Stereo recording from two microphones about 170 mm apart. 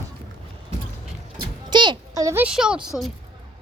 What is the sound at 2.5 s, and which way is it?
Speech, 5° right (ahead or behind).